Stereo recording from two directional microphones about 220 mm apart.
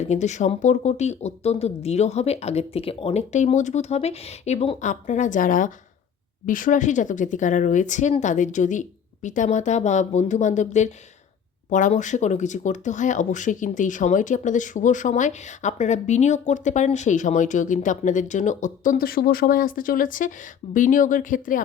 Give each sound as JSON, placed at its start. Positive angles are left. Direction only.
{"t": 0.0, "sound": "speech", "side_deg": 30}